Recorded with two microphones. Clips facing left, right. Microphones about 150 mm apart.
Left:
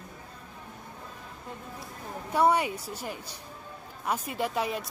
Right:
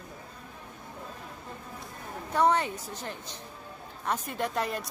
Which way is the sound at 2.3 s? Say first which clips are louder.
Left 1 dB; 10° left (ahead or behind).